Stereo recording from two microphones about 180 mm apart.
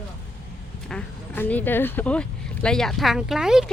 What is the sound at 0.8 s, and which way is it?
Speech, 5° left (ahead or behind).